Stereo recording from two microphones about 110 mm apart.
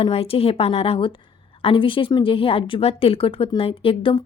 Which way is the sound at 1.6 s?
50° left (ahead or behind).